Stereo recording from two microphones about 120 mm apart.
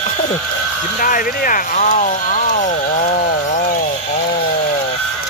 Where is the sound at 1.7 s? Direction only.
90° left.